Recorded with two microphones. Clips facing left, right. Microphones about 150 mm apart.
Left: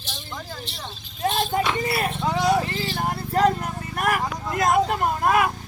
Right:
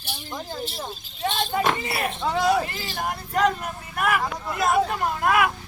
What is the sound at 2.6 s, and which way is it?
Vehicle, 30° left (ahead or behind).